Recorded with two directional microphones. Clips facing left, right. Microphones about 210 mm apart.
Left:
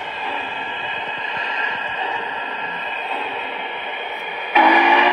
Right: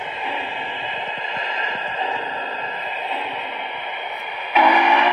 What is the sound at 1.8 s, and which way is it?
Music, 30° right (ahead or behind).